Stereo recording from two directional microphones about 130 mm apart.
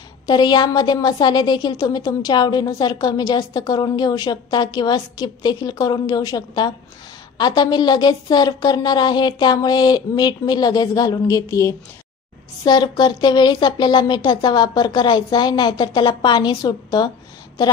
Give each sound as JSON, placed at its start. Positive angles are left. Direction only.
{"t": 0.3, "sound": "a woman's voice", "side_deg": 35}